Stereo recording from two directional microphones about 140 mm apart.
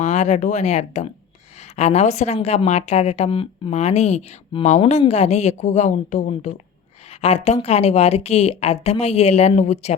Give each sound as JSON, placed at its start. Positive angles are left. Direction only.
{"t": 0.0, "sound": "a woman's voice", "side_deg": 55}